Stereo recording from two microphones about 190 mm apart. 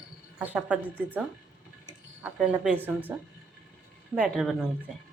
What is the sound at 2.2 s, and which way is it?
Speech, 5° right (ahead or behind).